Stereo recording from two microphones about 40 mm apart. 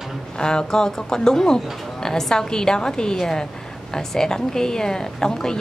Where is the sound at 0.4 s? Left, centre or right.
Centre.